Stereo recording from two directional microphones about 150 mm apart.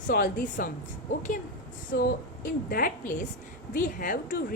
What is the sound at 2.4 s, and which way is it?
A woman's voice, 70° left (ahead or behind).